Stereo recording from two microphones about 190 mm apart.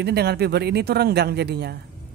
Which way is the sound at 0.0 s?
60° right (ahead or behind).